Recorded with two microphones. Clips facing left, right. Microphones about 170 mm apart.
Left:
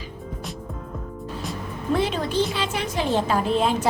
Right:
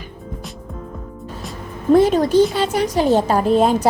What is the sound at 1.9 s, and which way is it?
A woman's voice, 40° right (ahead or behind).